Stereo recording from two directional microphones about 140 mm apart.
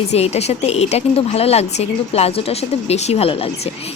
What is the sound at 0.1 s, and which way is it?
Speech, 50° left (ahead or behind).